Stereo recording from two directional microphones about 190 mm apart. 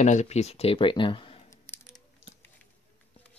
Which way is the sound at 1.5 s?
15° left (ahead or behind).